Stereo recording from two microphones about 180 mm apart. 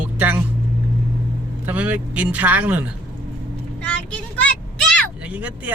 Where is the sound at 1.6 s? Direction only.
10° right (ahead or behind).